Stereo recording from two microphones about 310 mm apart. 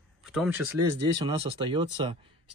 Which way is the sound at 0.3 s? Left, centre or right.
Centre.